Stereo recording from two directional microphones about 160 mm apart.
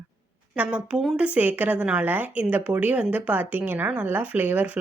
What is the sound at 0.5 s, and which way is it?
A woman's voice, 10° right (ahead or behind).